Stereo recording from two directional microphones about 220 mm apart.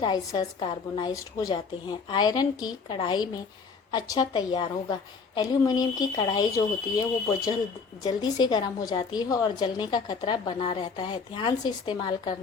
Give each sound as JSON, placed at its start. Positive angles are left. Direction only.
{"t": 0.0, "sound": "a woman's voice", "side_deg": 20}